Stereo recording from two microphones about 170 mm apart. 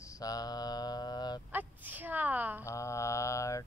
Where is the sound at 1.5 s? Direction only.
10° right (ahead or behind).